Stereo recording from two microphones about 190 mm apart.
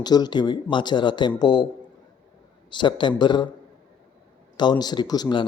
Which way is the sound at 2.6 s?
25° left (ahead or behind).